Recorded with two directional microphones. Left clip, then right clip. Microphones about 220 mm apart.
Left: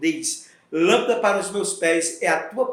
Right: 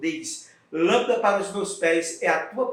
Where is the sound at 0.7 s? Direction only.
50° left (ahead or behind).